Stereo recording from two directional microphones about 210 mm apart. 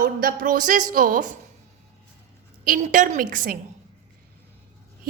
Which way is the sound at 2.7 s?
35° right (ahead or behind).